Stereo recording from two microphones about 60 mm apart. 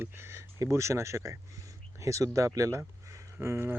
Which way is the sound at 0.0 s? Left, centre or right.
Right.